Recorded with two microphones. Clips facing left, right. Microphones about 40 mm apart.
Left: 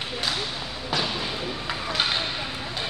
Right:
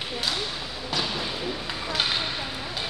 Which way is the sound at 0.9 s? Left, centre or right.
Centre.